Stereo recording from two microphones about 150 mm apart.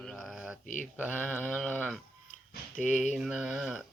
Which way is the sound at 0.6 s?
60° left (ahead or behind).